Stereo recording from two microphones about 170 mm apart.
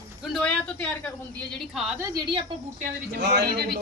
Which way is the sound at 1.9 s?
20° right (ahead or behind).